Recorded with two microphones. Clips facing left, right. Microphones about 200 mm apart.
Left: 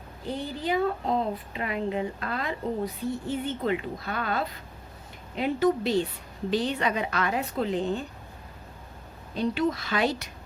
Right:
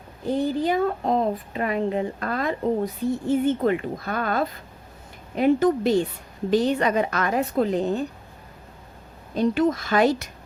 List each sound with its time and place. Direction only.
0.3 s a woman's voice: 45° right (ahead or behind)
9.3 s a woman's voice: 45° right (ahead or behind)